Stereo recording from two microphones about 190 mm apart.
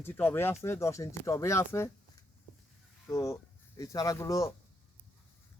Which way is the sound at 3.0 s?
15° left (ahead or behind).